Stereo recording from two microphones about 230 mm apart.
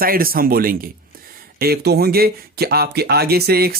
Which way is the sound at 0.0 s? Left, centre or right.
Right.